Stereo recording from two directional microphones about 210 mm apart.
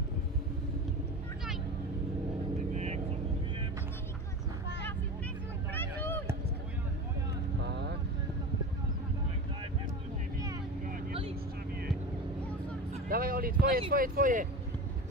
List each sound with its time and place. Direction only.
2.7 s vehicle: 30° right (ahead or behind)
5.7 s a sound: 10° left (ahead or behind)
7.6 s vehicle: 55° right (ahead or behind)
13.1 s speech: 45° right (ahead or behind)